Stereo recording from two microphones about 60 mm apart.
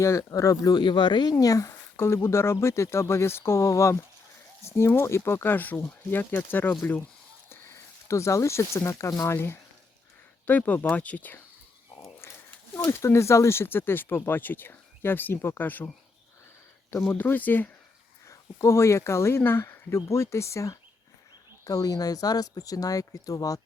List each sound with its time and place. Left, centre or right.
0.0 s speech: left
1.4 s speech: left
2.0 s speech: left
4.8 s speech: left
7.5 s speech: left
9.2 s speech: left
10.4 s speech: left
12.7 s speech: left
16.9 s speech: left
18.3 s speech: left
21.7 s speech: left